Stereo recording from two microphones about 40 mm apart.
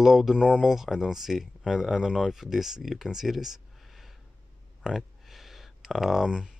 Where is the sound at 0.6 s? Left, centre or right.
Centre.